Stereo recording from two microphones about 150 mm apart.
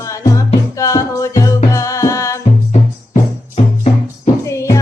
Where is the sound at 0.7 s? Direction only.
20° left (ahead or behind).